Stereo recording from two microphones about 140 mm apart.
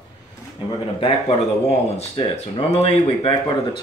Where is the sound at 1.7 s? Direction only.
50° left (ahead or behind).